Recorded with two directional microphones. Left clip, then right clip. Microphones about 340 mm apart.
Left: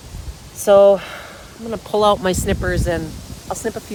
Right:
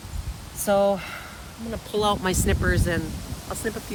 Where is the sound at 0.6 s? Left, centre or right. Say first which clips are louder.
Left 11 dB; centre.